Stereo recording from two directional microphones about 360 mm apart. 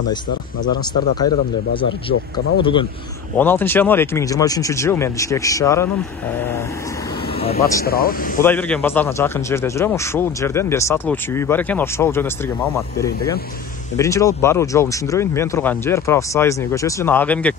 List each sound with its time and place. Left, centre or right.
0.1 s a man's voice: centre
2.6 s a man's voice: centre
7.3 s speech: centre
7.8 s speech: left
8.4 s a man's voice: centre